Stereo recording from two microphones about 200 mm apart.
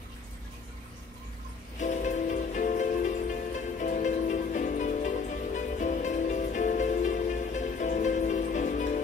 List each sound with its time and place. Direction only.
1.8 s music: 35° left (ahead or behind)